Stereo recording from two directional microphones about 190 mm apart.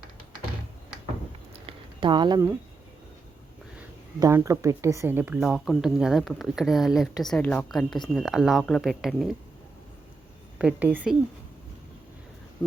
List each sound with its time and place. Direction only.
1.6 s a sound: 25° right (ahead or behind)
4.2 s speech: 15° right (ahead or behind)
10.6 s speech: 5° right (ahead or behind)